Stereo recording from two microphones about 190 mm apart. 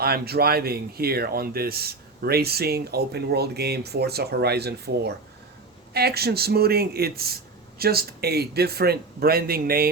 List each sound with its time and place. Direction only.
0.0 s speech: 55° right (ahead or behind)